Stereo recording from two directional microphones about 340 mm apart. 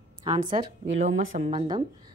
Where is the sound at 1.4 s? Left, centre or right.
Centre.